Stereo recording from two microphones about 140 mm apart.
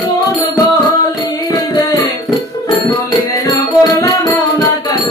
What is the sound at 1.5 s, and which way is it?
Music, 25° left (ahead or behind).